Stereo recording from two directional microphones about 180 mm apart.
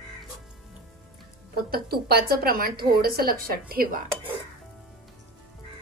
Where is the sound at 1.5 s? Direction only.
60° right (ahead or behind).